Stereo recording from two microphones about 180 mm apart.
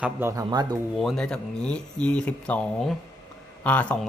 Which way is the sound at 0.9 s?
Centre (ahead or behind).